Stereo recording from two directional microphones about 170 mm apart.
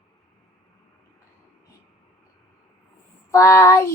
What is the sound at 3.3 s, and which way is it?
Speech, 20° left (ahead or behind).